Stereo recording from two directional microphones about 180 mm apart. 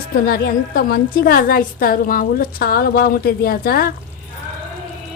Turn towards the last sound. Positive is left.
turn(degrees=55)  # may be behind; listen again after turning